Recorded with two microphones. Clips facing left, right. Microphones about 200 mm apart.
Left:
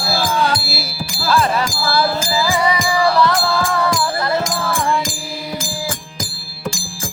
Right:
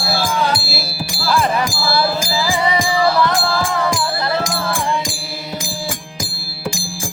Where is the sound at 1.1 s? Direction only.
15° right (ahead or behind).